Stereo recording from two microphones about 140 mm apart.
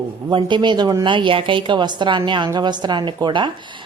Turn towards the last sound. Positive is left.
turn(degrees=-35)  # may be behind; listen again after turning